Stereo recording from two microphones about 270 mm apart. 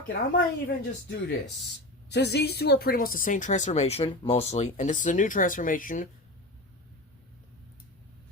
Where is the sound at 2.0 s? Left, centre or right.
Left.